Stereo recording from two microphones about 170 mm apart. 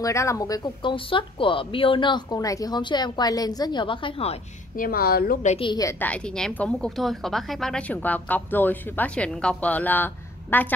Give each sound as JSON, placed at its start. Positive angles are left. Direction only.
{"t": 0.0, "sound": "speech", "side_deg": 15}
{"t": 4.7, "sound": "a woman's voice", "side_deg": 60}
{"t": 5.6, "sound": "a woman's voice", "side_deg": 25}